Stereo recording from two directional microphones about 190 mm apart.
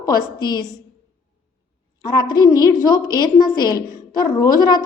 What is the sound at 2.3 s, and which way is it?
A woman's voice, 20° left (ahead or behind).